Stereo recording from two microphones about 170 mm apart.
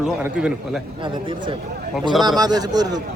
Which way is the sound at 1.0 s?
30° right (ahead or behind).